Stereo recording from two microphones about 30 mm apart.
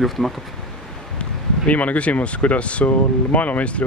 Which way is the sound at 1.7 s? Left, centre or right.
Left.